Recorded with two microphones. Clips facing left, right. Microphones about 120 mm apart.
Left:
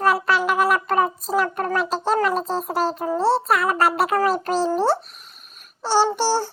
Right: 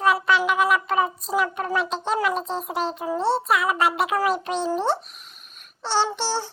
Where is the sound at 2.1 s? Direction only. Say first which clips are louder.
Left 4 dB; centre (ahead or behind).